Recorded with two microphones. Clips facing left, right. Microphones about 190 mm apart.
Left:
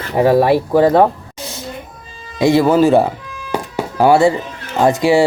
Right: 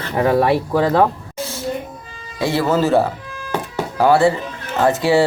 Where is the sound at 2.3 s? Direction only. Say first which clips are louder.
Left 6 dB; 15° left (ahead or behind).